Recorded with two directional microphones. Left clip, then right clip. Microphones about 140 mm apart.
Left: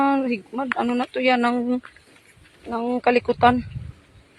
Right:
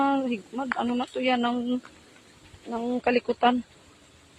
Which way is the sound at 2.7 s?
30° left (ahead or behind).